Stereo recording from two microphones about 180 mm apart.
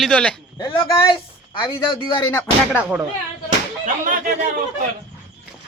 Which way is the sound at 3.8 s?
50° right (ahead or behind).